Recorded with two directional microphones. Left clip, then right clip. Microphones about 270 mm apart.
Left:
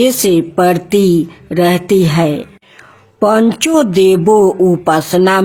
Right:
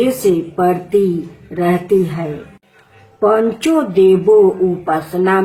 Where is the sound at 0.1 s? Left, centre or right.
Left.